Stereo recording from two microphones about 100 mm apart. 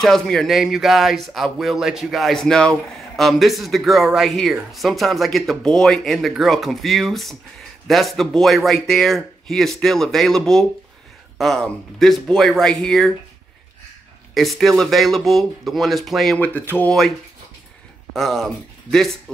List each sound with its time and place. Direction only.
0.0 s speech: 5° left (ahead or behind)
14.3 s speech: centre (ahead or behind)
16.3 s speech: 15° left (ahead or behind)
18.1 s speech: centre (ahead or behind)